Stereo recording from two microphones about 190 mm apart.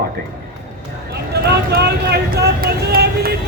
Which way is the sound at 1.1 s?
60° right (ahead or behind).